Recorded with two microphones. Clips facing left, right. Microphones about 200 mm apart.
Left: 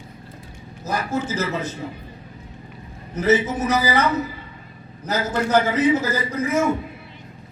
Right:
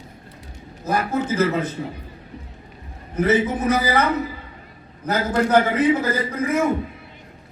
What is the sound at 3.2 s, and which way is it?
Speech, 55° right (ahead or behind).